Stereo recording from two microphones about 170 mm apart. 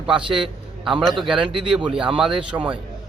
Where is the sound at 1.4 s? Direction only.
30° right (ahead or behind).